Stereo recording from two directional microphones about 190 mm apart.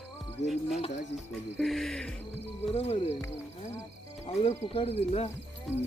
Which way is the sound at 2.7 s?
35° left (ahead or behind).